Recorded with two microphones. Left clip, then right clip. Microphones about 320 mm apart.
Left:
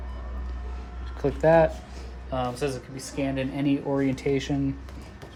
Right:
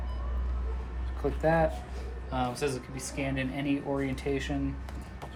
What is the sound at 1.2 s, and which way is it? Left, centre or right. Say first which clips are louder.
Speech: left 8 dB; left.